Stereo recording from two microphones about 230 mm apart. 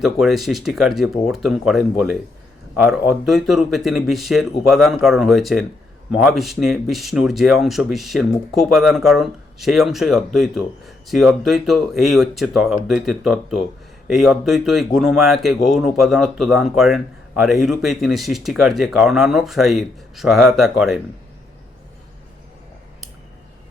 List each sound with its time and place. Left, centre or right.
0.0 s speech: centre